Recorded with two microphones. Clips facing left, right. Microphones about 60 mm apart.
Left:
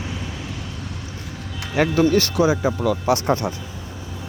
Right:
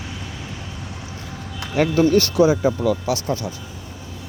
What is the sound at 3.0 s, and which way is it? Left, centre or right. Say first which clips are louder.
Speech: left 4 dB; left.